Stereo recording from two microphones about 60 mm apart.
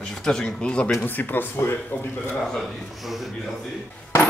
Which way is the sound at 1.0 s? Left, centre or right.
Left.